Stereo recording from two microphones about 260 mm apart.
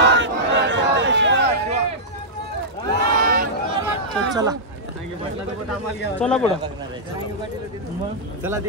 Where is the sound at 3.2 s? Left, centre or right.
Right.